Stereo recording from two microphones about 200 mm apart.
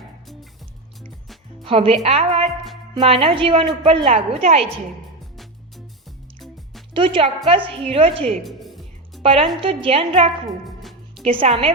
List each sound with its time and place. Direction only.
1.6 s a woman's voice: 30° right (ahead or behind)
5.4 s music: centre (ahead or behind)
6.9 s a woman's voice: 25° right (ahead or behind)
8.4 s music: centre (ahead or behind)
9.2 s a woman's voice: 30° right (ahead or behind)